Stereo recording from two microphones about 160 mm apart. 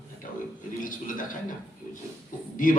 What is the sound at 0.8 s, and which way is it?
Speech, 55° left (ahead or behind).